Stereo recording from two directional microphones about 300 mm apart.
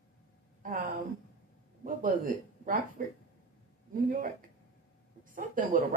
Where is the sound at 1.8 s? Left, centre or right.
Right.